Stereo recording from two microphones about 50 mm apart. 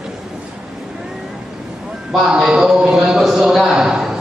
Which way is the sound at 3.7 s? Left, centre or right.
Centre.